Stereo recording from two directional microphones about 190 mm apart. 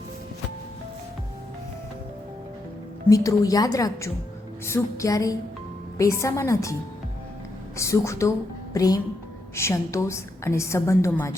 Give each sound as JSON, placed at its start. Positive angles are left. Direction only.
{"t": 3.1, "sound": "a woman's voice", "side_deg": 20}
{"t": 7.8, "sound": "a woman's voice", "side_deg": 15}